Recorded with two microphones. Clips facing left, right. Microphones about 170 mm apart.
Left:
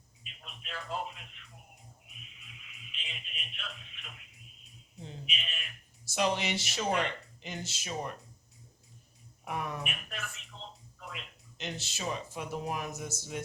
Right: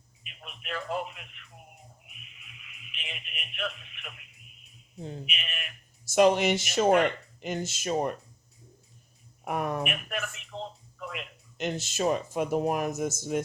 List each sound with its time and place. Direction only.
0.2 s a man's voice: 65° right (ahead or behind)
2.9 s radio: 65° right (ahead or behind)
5.0 s speech: 65° right (ahead or behind)
6.1 s speech: 50° right (ahead or behind)
9.4 s speech: 50° right (ahead or behind)
11.1 s speech: 50° right (ahead or behind)